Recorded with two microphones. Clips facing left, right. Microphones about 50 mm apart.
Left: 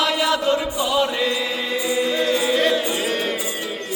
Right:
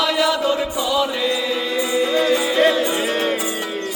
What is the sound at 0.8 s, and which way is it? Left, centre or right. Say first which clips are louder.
Music: right 1 dB; centre.